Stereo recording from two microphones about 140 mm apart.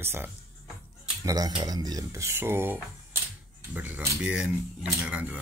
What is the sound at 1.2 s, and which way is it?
Speech, 25° right (ahead or behind).